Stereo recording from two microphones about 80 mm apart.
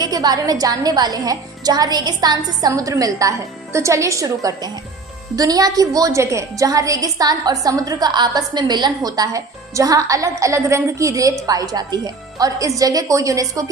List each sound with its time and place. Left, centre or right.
0.0 s a woman's voice: right